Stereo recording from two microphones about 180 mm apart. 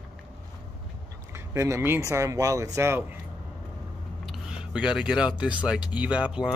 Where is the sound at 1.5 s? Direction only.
15° right (ahead or behind).